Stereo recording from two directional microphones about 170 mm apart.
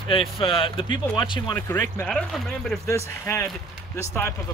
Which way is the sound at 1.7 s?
10° left (ahead or behind).